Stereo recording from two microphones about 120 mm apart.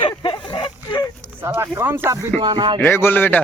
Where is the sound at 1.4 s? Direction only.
20° right (ahead or behind).